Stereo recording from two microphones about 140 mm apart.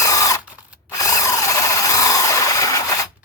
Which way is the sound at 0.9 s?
25° left (ahead or behind).